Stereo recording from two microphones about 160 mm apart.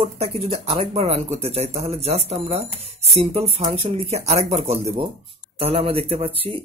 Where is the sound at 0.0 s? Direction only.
40° right (ahead or behind).